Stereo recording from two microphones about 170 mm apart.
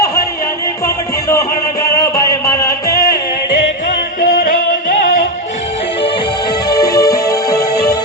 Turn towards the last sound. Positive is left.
turn(degrees=20)  # may be behind; listen again after turning